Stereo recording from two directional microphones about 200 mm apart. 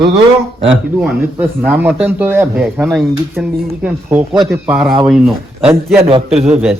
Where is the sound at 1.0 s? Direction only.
5° right (ahead or behind).